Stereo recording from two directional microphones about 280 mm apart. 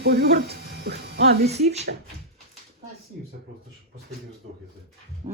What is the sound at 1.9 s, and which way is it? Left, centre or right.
Speech, right.